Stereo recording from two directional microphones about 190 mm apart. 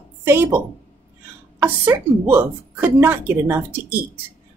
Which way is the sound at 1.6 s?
10° right (ahead or behind).